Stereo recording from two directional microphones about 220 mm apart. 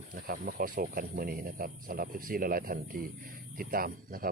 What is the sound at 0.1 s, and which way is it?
A man's voice, 40° right (ahead or behind).